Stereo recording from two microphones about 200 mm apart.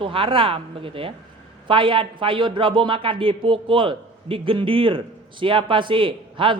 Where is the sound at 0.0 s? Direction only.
25° right (ahead or behind).